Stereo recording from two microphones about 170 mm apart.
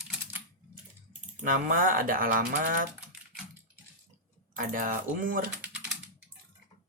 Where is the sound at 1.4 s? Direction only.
55° right (ahead or behind).